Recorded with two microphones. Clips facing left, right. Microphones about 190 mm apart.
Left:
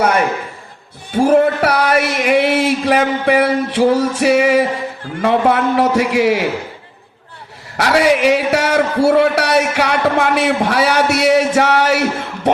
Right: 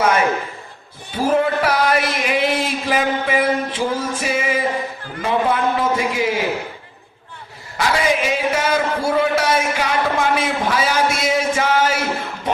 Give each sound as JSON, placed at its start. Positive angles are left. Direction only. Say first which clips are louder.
{"t": 1.1, "sound": "a sound", "louder": "left 6 dB", "side_deg": 65}
{"t": 5.2, "sound": "a man's voice", "louder": "left 5 dB", "side_deg": 70}
{"t": 7.8, "sound": "a man's voice", "louder": "left 6 dB", "side_deg": 70}